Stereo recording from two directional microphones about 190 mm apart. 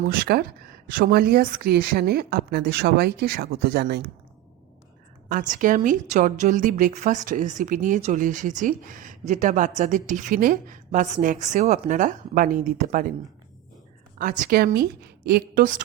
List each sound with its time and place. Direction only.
0.3 s a woman's voice: 55° right (ahead or behind)
5.3 s a woman's voice: 40° right (ahead or behind)
14.2 s a woman's voice: 45° right (ahead or behind)